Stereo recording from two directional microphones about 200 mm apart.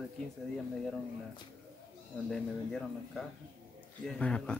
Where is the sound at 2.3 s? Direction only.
Centre (ahead or behind).